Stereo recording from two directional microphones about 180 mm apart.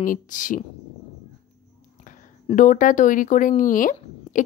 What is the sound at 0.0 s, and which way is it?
Speech, 45° left (ahead or behind).